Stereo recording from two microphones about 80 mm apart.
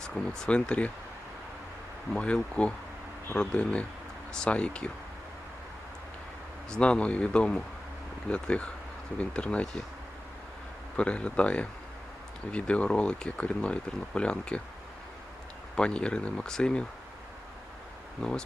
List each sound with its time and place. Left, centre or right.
0.0 s speech: centre
2.1 s speech: centre
6.7 s speech: centre
10.9 s speech: centre
15.7 s speech: centre
18.2 s speech: centre